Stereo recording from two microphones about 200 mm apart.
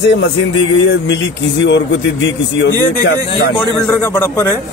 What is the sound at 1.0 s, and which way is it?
Speech, 60° left (ahead or behind).